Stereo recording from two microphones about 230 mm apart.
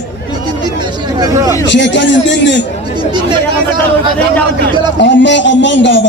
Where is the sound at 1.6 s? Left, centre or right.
Left.